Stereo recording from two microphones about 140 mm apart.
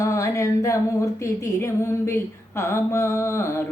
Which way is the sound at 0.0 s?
20° left (ahead or behind).